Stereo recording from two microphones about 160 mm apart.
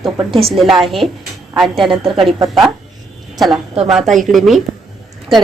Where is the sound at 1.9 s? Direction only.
35° right (ahead or behind).